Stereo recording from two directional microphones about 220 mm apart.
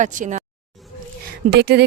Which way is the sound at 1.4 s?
50° right (ahead or behind).